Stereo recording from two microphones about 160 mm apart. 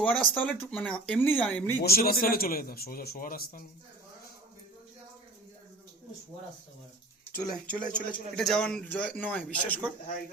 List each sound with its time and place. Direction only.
0.0 s speech: 5° left (ahead or behind)
1.8 s a man's voice: 70° left (ahead or behind)
7.3 s speech: 5° left (ahead or behind)